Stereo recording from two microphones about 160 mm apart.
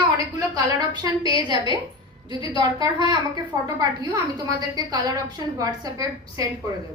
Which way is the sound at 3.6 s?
25° right (ahead or behind).